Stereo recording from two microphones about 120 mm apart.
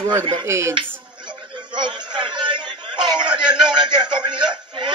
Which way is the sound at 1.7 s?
40° right (ahead or behind).